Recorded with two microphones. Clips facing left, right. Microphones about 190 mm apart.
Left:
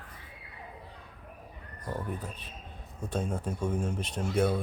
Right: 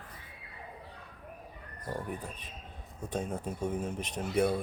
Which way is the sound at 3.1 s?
10° right (ahead or behind).